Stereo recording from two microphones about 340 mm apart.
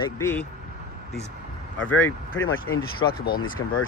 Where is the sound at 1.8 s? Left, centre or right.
Centre.